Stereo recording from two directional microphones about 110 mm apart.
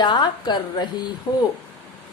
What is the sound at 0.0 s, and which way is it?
A woman's voice, 40° left (ahead or behind).